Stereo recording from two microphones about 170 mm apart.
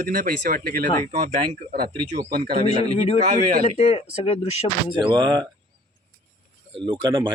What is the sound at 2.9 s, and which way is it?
Speech, 40° left (ahead or behind).